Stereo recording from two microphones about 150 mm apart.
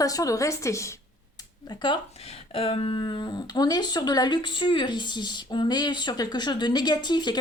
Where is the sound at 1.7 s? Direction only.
30° left (ahead or behind).